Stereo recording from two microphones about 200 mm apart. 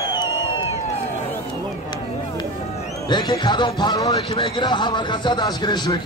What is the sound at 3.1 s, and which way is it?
A man's voice, 20° left (ahead or behind).